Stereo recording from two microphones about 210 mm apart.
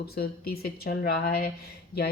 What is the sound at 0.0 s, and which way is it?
A woman's voice, 45° left (ahead or behind).